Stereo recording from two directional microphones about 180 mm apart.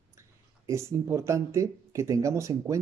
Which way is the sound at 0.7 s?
15° right (ahead or behind).